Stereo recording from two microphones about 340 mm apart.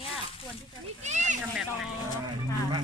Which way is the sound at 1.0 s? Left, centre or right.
Centre.